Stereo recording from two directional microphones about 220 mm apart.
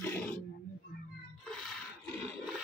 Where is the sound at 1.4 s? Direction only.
5° left (ahead or behind).